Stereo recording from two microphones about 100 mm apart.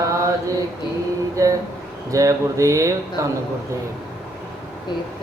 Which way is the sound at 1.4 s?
35° right (ahead or behind).